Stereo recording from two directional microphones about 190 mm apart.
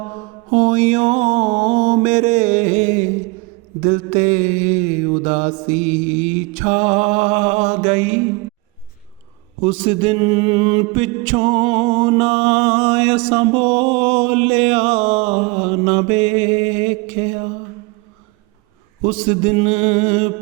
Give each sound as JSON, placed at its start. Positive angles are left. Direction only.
{"t": 0.5, "sound": "mantra", "side_deg": -35}
{"t": 9.6, "sound": "mantra", "side_deg": -30}
{"t": 19.0, "sound": "mantra", "side_deg": -35}